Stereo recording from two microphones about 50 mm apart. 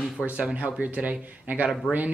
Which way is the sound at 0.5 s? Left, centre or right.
Right.